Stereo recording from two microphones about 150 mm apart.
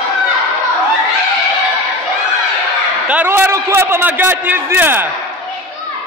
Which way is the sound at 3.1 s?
15° right (ahead or behind).